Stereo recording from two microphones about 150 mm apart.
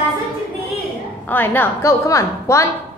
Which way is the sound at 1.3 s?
15° left (ahead or behind).